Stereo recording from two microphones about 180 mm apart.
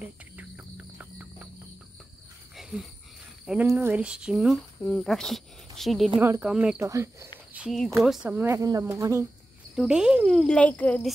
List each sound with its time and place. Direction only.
0.0 s cricket: 5° right (ahead or behind)
2.5 s a sound: centre (ahead or behind)
3.6 s a child's voice: 10° right (ahead or behind)
6.1 s a child's voice: 10° right (ahead or behind)
6.8 s speech: 15° right (ahead or behind)
7.5 s speech: centre (ahead or behind); by 9.2 s 20° right (ahead or behind)
9.8 s a child's voice: 5° right (ahead or behind)